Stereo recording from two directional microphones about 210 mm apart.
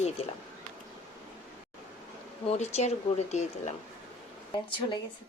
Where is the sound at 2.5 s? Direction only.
30° left (ahead or behind).